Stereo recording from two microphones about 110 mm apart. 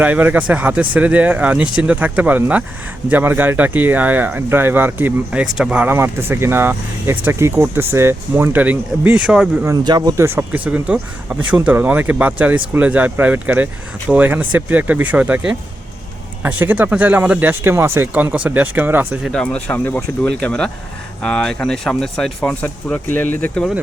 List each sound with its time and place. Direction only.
0.0 s speech: 15° right (ahead or behind)
9.6 s speech: 40° right (ahead or behind)
10.2 s speech: 20° right (ahead or behind)
19.3 s speech: 10° left (ahead or behind)
22.6 s speech: 15° left (ahead or behind)